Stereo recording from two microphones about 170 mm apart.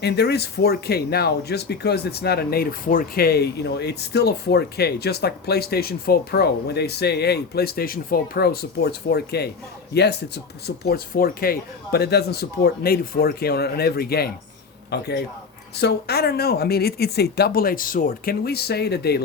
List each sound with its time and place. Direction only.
0.0 s speech: 75° left (ahead or behind)